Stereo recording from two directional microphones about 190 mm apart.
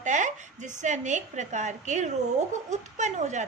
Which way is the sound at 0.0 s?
40° right (ahead or behind).